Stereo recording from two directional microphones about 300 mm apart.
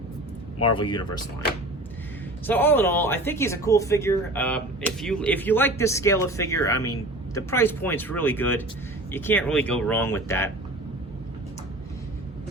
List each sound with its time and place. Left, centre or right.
0.6 s speech: centre
2.5 s speech: centre